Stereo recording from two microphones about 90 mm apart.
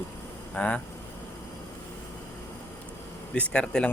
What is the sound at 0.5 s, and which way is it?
Speech, 15° left (ahead or behind).